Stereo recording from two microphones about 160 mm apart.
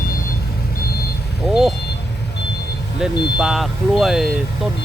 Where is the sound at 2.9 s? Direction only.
5° right (ahead or behind).